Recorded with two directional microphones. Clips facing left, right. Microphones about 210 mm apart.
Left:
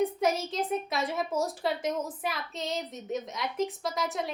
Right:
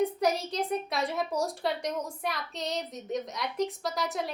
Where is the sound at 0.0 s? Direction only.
Centre (ahead or behind).